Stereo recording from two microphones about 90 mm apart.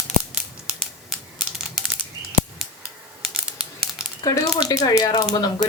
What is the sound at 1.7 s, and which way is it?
Bird flight, 5° right (ahead or behind).